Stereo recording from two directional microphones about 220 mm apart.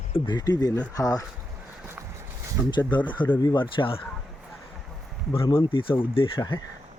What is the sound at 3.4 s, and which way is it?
Speech, 20° left (ahead or behind).